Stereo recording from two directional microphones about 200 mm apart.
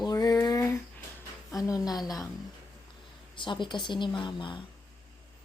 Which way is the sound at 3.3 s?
25° left (ahead or behind).